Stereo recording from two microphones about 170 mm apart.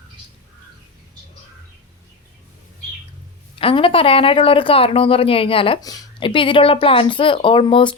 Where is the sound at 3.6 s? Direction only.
30° left (ahead or behind).